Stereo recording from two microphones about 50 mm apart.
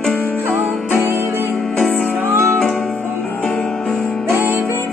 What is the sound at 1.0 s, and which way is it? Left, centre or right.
Music, right.